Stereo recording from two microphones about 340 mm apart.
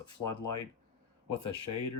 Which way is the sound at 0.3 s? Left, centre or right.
Left.